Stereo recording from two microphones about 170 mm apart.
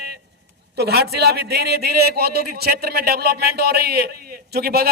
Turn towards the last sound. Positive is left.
turn(degrees=-65)  # may be behind; listen again after turning